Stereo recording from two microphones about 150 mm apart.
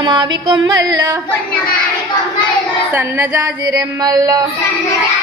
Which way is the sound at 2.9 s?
10° right (ahead or behind).